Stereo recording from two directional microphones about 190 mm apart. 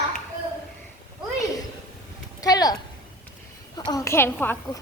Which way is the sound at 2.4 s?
20° left (ahead or behind).